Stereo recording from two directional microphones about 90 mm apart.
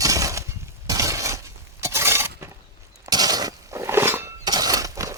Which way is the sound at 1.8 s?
30° right (ahead or behind).